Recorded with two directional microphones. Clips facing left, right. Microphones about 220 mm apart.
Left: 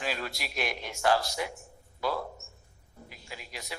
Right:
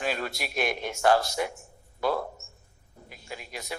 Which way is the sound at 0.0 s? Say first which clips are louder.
Right 4 dB; 50° right (ahead or behind).